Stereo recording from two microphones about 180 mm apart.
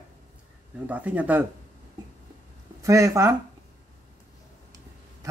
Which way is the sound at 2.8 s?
15° right (ahead or behind).